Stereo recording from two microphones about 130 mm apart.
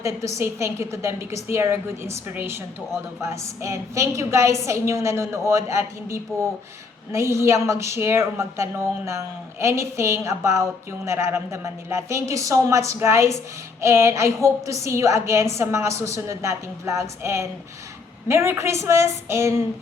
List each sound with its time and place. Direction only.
0.0 s a woman's voice: 25° right (ahead or behind)